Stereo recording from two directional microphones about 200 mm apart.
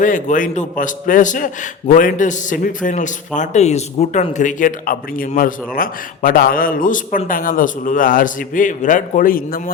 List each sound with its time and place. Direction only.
0.0 s a man's voice: 40° left (ahead or behind)